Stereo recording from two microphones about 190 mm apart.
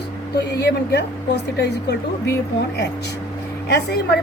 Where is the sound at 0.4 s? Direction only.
60° left (ahead or behind).